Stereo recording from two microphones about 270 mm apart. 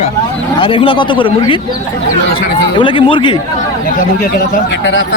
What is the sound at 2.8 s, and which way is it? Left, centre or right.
Speech, centre.